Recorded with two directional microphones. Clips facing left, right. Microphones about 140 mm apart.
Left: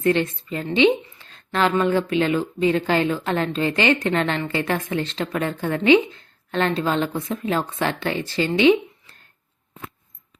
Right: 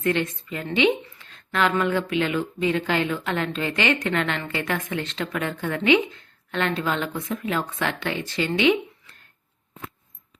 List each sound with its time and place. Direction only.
0.0 s a woman's voice: 30° left (ahead or behind)